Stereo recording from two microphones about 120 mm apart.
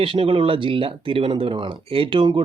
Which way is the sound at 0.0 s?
45° right (ahead or behind).